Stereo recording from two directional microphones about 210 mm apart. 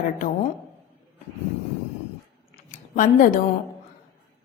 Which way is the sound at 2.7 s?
40° left (ahead or behind).